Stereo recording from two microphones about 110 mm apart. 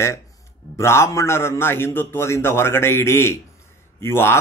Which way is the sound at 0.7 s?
25° left (ahead or behind).